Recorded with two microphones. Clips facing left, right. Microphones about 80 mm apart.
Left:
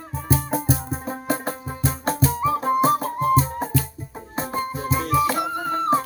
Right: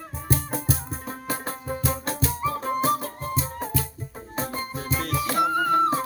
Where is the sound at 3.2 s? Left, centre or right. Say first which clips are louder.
Left 11 dB; left.